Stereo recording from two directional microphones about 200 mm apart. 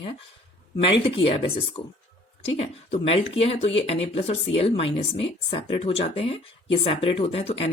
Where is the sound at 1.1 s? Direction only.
25° left (ahead or behind).